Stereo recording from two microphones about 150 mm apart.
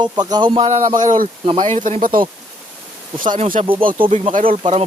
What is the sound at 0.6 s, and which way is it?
Speech, 55° right (ahead or behind).